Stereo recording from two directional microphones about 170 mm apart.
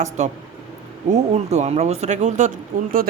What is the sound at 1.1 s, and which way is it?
Speech, 40° right (ahead or behind).